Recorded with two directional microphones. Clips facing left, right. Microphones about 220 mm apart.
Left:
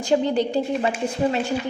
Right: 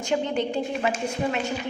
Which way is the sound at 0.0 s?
35° left (ahead or behind).